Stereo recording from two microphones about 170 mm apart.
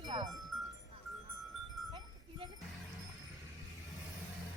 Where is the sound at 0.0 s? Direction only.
25° right (ahead or behind).